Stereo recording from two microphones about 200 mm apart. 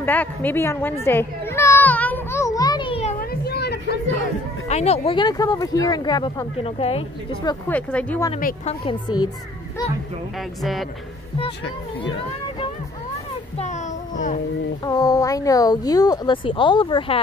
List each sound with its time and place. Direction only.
0.0 s children playing: 10° left (ahead or behind); by 3.2 s 30° left (ahead or behind)
3.2 s a sound: 50° left (ahead or behind)
4.6 s speech: 35° left (ahead or behind)
7.6 s speech: 5° left (ahead or behind)
8.4 s a woman's voice: 45° left (ahead or behind)
8.8 s speech: 20° left (ahead or behind)
10.3 s speech: centre (ahead or behind)
13.6 s a sound: 35° left (ahead or behind)
14.8 s speech: 20° left (ahead or behind)